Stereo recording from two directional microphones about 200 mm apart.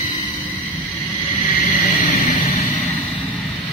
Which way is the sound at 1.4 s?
35° left (ahead or behind).